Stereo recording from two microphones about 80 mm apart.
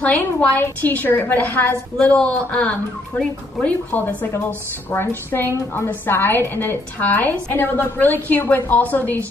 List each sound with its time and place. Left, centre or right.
0.0 s a woman's voice: centre
2.0 s a woman's voice: centre